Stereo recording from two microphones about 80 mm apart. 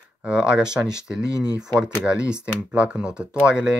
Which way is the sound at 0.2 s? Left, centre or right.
Centre.